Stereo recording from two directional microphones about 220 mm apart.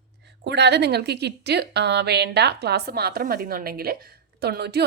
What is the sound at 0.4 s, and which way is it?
A woman's voice, 50° right (ahead or behind).